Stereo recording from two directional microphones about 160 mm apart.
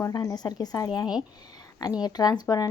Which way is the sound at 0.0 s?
20° left (ahead or behind).